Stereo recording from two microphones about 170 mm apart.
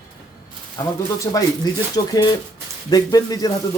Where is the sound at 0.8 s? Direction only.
20° left (ahead or behind).